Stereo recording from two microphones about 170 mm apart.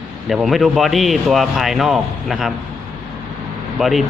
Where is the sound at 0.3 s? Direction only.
Centre (ahead or behind).